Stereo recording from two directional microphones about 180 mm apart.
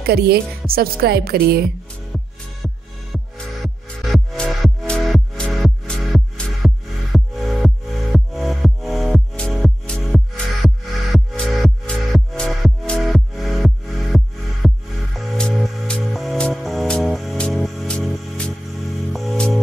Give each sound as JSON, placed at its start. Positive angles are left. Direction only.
{"t": 0.0, "sound": "a woman's voice", "side_deg": -60}
{"t": 2.1, "sound": "music", "side_deg": 0}